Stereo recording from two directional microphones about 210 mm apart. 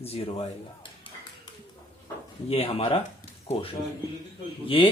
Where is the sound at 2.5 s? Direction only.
25° left (ahead or behind).